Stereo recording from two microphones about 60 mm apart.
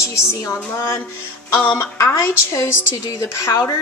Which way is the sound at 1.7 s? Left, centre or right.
Left.